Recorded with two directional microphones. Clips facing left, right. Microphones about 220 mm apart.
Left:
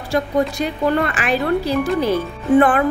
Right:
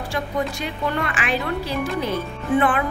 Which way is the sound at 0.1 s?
40° left (ahead or behind).